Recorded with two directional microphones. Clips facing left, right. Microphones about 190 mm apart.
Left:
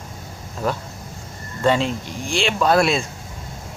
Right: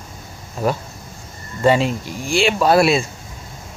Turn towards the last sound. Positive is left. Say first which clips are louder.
# right 3 dB
turn(degrees=-5)  # may be behind; listen again after turning